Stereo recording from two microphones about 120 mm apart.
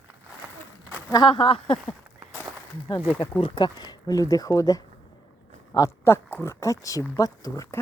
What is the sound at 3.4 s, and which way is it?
A woman's voice, 35° left (ahead or behind).